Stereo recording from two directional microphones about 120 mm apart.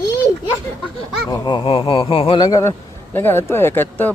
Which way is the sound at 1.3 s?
35° left (ahead or behind).